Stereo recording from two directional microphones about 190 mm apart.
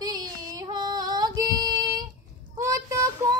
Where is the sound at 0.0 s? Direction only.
20° right (ahead or behind).